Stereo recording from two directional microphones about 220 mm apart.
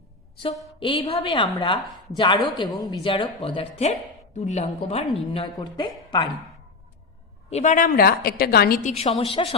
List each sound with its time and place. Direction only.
0.8 s a woman's voice: 25° left (ahead or behind)
7.5 s a woman's voice: 35° left (ahead or behind)